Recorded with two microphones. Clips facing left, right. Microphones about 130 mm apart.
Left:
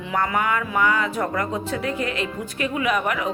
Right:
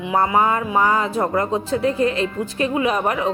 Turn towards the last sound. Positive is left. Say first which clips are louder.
# right 3 dB
turn(degrees=-30)  # may be behind; listen again after turning